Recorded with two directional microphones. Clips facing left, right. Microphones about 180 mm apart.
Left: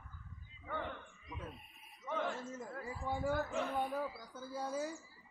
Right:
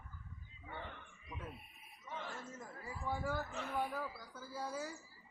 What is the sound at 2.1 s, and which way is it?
Speech, 55° left (ahead or behind).